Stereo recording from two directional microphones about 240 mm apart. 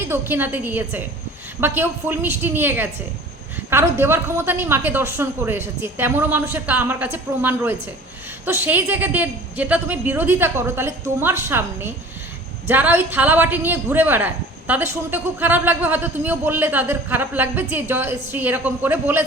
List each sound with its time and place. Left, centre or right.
0.1 s a woman's voice: centre